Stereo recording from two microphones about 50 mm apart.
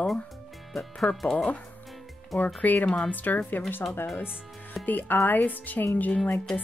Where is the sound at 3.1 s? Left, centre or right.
Left.